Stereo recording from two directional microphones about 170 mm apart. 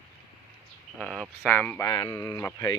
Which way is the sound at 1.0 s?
Centre (ahead or behind).